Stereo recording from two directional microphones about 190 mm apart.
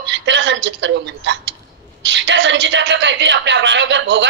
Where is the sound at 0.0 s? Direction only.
70° right (ahead or behind).